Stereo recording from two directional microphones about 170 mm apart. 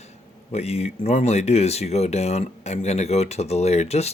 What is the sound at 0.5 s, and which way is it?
Speech, 40° left (ahead or behind).